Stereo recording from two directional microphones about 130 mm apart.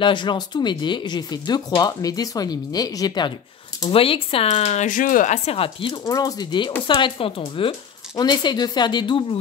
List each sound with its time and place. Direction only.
0.0 s speech: 35° left (ahead or behind)
3.9 s speech: 45° left (ahead or behind)
6.0 s speech: 30° left (ahead or behind)